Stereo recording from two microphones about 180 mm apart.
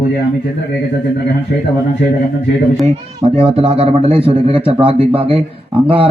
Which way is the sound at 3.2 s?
30° right (ahead or behind).